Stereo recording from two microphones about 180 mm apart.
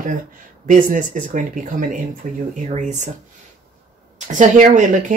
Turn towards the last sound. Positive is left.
turn(degrees=-45)  # may be behind; listen again after turning